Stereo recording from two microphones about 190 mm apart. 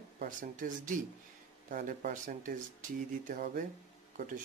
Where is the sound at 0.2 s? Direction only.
45° right (ahead or behind).